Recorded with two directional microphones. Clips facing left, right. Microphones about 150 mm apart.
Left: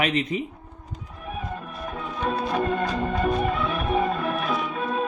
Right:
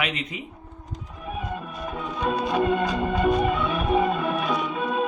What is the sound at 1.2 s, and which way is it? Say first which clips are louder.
Music: right 1 dB; centre (ahead or behind).